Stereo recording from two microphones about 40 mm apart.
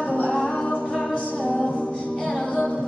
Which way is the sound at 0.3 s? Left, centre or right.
Centre.